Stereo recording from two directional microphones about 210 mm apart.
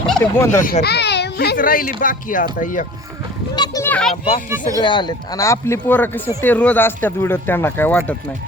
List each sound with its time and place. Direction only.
0.0 s speech: 5° left (ahead or behind)
0.6 s speech: 45° left (ahead or behind)
3.5 s children playing: 20° left (ahead or behind)
3.8 s children playing: 5° left (ahead or behind)
4.8 s speech: 20° left (ahead or behind)